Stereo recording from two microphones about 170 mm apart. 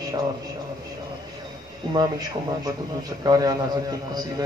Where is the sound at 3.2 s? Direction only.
25° right (ahead or behind).